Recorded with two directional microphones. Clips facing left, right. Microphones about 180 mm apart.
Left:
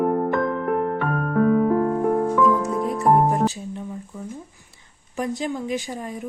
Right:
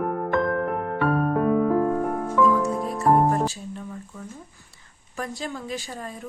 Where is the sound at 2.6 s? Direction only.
20° left (ahead or behind).